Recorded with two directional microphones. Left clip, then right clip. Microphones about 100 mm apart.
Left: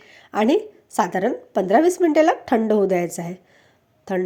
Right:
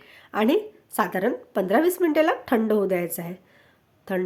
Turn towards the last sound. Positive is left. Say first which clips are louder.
# left 3 dB
turn(degrees=20)  # may be behind; listen again after turning